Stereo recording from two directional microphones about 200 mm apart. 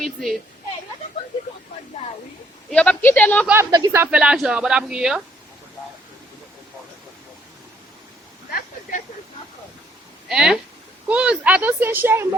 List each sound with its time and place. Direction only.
0.0 s speech: centre (ahead or behind)
2.6 s speech: 5° left (ahead or behind)
3.4 s speech: 10° right (ahead or behind)
8.5 s a sound: 40° left (ahead or behind)
10.2 s speech: 5° right (ahead or behind)